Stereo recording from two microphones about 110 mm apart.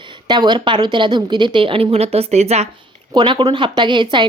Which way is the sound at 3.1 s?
40° right (ahead or behind).